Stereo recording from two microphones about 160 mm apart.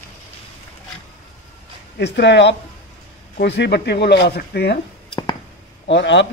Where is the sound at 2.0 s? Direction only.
90° left.